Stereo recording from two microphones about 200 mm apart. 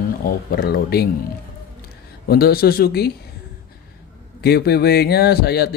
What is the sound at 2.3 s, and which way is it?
Speech, 50° left (ahead or behind).